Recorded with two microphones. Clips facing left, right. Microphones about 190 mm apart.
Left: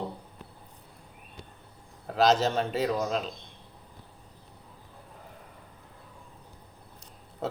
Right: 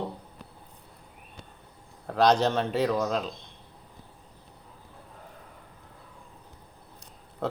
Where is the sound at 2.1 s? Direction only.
5° left (ahead or behind).